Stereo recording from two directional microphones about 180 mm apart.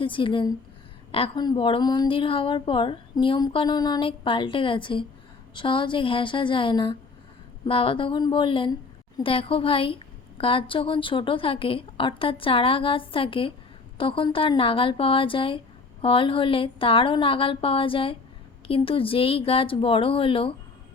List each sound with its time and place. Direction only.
0.0 s a woman's voice: 30° left (ahead or behind)